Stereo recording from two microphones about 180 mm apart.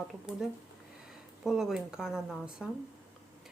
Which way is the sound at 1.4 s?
Centre (ahead or behind).